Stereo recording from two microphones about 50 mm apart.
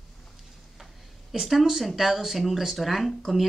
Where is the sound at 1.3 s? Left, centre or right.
Centre.